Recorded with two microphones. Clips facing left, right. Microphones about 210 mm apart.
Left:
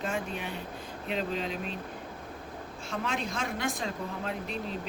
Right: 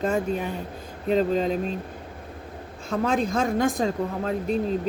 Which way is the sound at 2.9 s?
40° right (ahead or behind).